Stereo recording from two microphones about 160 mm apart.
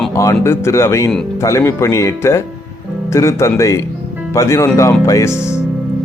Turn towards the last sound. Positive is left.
turn(degrees=20)  # may be behind; listen again after turning